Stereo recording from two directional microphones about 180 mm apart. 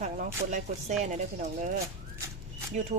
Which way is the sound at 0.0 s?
45° right (ahead or behind).